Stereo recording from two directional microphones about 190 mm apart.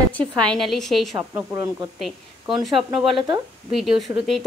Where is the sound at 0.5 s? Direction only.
Centre (ahead or behind).